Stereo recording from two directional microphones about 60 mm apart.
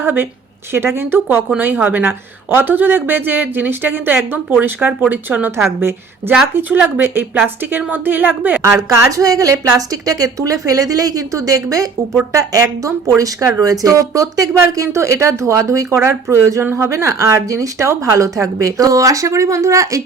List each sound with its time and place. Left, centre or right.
0.0 s speech: right
1.5 s a woman's voice: right
6.6 s speech: right
8.6 s a woman's voice: right
14.7 s speech: right